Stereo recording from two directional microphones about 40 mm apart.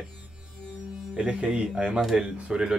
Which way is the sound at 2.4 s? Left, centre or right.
Right.